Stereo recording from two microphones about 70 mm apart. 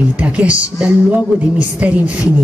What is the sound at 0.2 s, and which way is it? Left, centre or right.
A woman's voice, centre.